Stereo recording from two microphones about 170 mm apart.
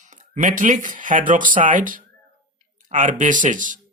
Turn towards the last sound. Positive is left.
turn(degrees=-50)  # may be behind; listen again after turning